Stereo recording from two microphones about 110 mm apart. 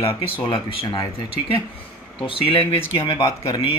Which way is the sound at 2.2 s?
55° left (ahead or behind).